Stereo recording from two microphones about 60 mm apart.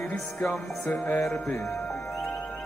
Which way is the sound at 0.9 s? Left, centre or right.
Left.